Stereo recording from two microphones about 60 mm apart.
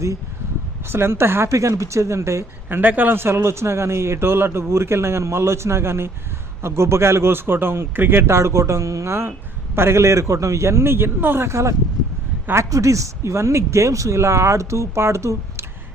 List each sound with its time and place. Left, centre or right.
0.9 s a man's voice: right
2.6 s a man's voice: right
8.3 s a man's voice: right
11.4 s speech: right